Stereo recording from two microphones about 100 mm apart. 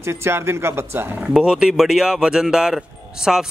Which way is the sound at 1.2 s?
5° right (ahead or behind).